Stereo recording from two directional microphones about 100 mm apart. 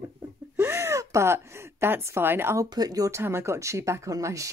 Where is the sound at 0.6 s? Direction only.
25° right (ahead or behind).